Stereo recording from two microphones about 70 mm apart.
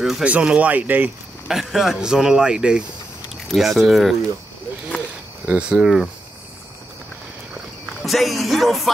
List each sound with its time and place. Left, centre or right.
0.2 s speech: centre
1.5 s speech: centre
3.5 s music: centre
5.5 s speech: centre
8.0 s music: centre